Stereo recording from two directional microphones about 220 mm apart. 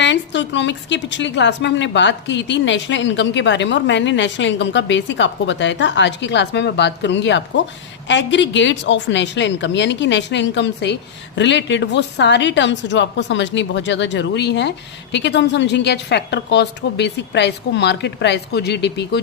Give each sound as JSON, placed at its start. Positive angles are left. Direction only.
{"t": 0.0, "sound": "a woman's voice", "side_deg": 55}